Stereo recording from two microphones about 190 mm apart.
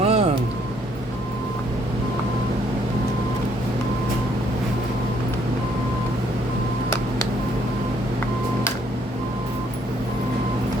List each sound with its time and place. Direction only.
0.0 s vehicle: 35° right (ahead or behind)